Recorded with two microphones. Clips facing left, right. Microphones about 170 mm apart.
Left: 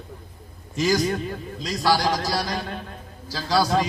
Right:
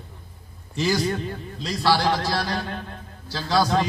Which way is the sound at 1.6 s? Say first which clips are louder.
Right 1 dB; 10° left (ahead or behind).